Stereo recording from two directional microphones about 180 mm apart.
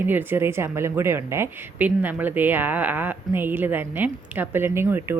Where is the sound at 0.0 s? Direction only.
10° right (ahead or behind).